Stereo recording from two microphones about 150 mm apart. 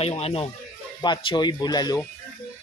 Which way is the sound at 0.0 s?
40° left (ahead or behind).